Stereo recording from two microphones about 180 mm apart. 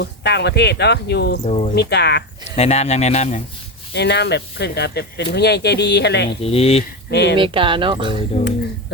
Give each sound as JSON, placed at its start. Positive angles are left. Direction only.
{"t": 0.0, "sound": "speech", "side_deg": 70}
{"t": 1.5, "sound": "speech", "side_deg": 35}
{"t": 1.7, "sound": "speech", "side_deg": 65}
{"t": 2.6, "sound": "speech", "side_deg": 35}
{"t": 3.9, "sound": "speech", "side_deg": 70}
{"t": 6.4, "sound": "speech", "side_deg": 35}
{"t": 7.1, "sound": "speech", "side_deg": 70}
{"t": 7.3, "sound": "speech", "side_deg": -30}
{"t": 8.3, "sound": "speech", "side_deg": 35}